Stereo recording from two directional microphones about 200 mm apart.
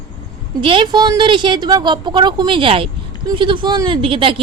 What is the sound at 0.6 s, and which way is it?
A woman's voice, 25° right (ahead or behind).